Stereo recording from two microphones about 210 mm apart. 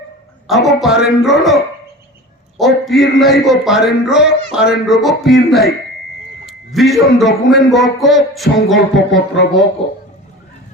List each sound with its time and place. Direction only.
0.4 s a man's voice: centre (ahead or behind)
2.6 s a man's voice: centre (ahead or behind)
9.1 s speech: 60° left (ahead or behind)